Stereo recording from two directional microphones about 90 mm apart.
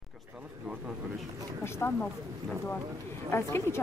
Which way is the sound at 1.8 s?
30° left (ahead or behind).